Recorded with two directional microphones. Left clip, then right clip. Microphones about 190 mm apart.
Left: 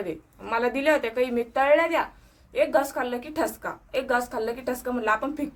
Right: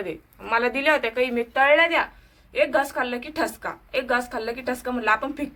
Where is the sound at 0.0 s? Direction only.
10° left (ahead or behind).